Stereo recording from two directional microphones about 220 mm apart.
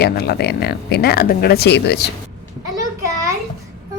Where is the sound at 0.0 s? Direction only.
45° left (ahead or behind).